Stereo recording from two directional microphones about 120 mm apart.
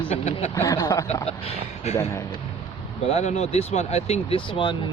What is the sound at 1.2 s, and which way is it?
Speech, 60° left (ahead or behind).